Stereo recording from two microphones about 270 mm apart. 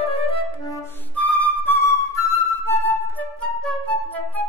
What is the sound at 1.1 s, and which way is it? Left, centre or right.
Flute, centre.